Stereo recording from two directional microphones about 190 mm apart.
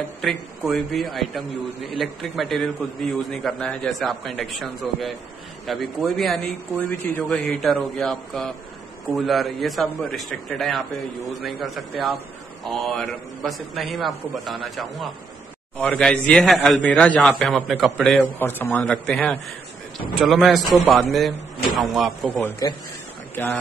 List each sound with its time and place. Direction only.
0.2 s a man's voice: centre (ahead or behind)
18.4 s a man's voice: 10° left (ahead or behind)
22.6 s a man's voice: 20° left (ahead or behind)